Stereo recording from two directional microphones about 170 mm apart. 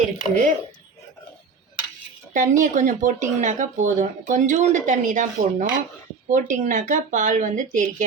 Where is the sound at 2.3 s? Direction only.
50° right (ahead or behind).